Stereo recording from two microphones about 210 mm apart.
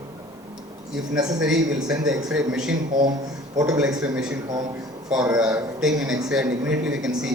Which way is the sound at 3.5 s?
15° right (ahead or behind).